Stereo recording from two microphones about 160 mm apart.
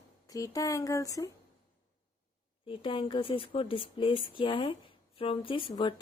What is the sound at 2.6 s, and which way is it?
A woman's voice, 35° left (ahead or behind).